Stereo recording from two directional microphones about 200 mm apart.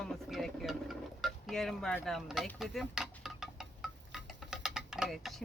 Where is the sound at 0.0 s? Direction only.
Centre (ahead or behind).